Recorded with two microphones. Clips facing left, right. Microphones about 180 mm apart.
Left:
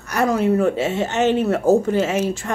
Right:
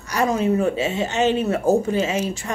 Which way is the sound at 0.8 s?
15° right (ahead or behind).